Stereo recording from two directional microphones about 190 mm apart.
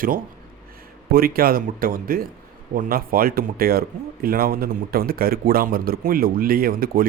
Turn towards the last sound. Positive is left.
turn(degrees=-50)  # may be behind; listen again after turning